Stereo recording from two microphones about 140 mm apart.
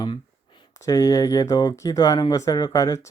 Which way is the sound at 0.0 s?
30° left (ahead or behind).